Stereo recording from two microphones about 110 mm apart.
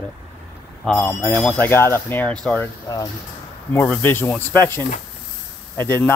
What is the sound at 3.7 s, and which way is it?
Speech, 15° left (ahead or behind).